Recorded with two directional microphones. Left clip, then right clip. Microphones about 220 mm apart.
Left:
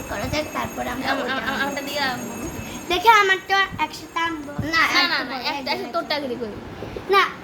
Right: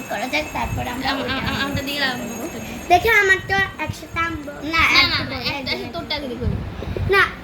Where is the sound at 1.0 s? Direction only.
15° left (ahead or behind).